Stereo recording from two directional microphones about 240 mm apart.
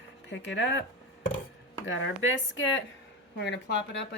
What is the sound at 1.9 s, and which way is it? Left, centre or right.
A woman's voice, left.